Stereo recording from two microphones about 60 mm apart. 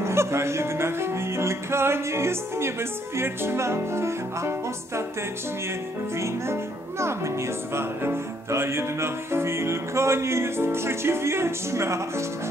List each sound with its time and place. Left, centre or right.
0.0 s music: right
6.1 s music: right